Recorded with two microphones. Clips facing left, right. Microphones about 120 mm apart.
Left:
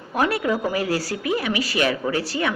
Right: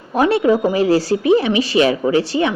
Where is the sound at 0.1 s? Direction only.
25° right (ahead or behind).